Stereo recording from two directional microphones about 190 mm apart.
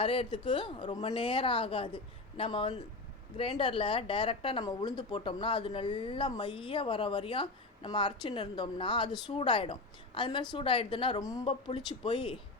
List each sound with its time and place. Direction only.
0.0 s a woman's voice: 30° left (ahead or behind)